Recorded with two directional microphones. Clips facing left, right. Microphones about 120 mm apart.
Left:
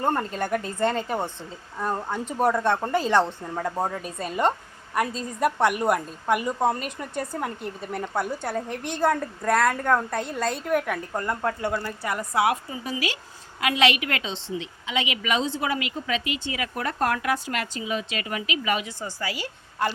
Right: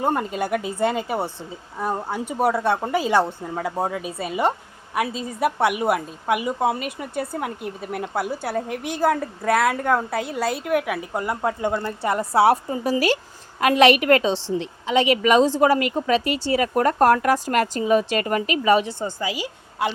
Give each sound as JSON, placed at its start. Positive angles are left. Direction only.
{"t": 0.0, "sound": "a woman's voice", "side_deg": -10}